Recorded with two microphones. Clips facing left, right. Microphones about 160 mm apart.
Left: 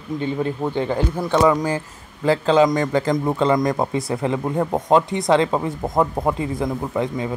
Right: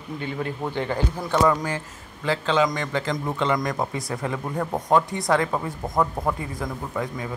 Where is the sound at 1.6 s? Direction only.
35° left (ahead or behind).